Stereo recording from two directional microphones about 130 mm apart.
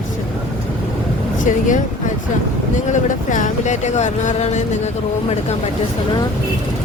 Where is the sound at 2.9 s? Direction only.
75° left (ahead or behind).